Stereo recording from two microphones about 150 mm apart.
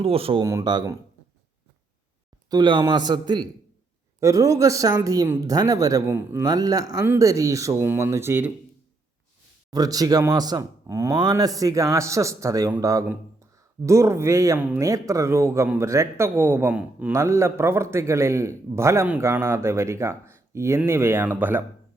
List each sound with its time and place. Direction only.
0.0 s speech: 40° right (ahead or behind)
0.4 s speech: 25° right (ahead or behind)
2.5 s speech: 30° right (ahead or behind); by 8.5 s 15° right (ahead or behind)
9.6 s speech: 25° right (ahead or behind)